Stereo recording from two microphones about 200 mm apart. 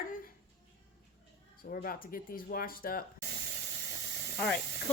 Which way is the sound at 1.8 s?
45° left (ahead or behind).